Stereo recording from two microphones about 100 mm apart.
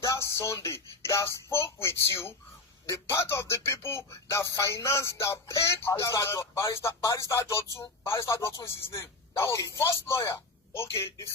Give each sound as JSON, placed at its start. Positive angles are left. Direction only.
{"t": 0.0, "sound": "speech", "side_deg": 30}